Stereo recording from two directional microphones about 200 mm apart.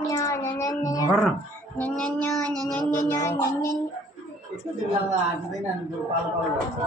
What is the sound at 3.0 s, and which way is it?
Music, 15° left (ahead or behind).